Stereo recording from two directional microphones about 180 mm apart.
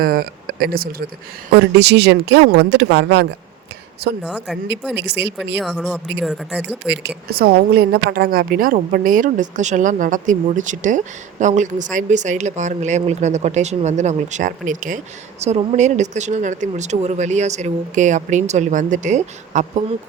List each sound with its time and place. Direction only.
0.0 s speech: 55° right (ahead or behind)
1.7 s speech: 70° right (ahead or behind)
4.2 s speech: 5° right (ahead or behind)
4.9 s speech: 70° right (ahead or behind)
5.7 s speech: centre (ahead or behind)
6.8 s speech: 70° right (ahead or behind)
7.3 s a woman's voice: 60° right (ahead or behind); by 19.6 s 45° right (ahead or behind)